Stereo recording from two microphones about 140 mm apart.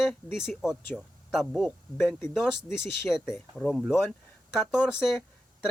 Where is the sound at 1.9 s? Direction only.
15° left (ahead or behind).